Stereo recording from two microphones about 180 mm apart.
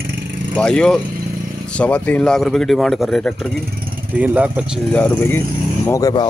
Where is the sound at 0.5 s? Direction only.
5° left (ahead or behind).